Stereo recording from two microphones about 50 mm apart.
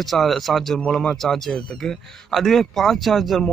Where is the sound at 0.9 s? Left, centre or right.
Centre.